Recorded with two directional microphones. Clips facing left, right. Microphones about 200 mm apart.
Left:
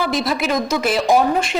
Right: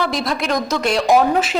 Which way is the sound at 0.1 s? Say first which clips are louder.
Left 1 dB; 5° left (ahead or behind).